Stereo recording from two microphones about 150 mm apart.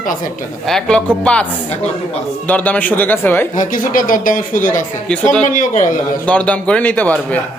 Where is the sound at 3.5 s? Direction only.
60° left (ahead or behind).